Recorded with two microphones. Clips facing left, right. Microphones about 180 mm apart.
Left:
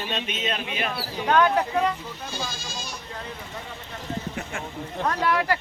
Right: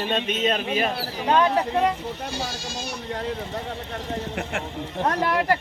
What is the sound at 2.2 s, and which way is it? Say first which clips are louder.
Speech: right 3 dB; 70° right (ahead or behind).